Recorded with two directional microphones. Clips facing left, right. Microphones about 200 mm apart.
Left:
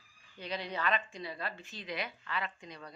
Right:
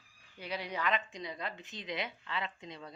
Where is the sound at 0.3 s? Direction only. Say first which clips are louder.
Even; 10° right (ahead or behind).